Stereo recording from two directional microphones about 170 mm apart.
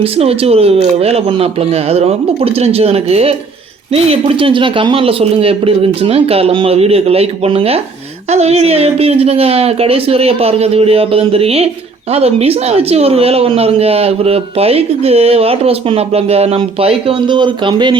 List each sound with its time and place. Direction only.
0.0 s speech: 35° right (ahead or behind)